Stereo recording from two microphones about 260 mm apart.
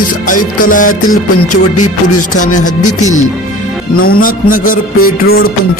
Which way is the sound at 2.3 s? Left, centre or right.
Left.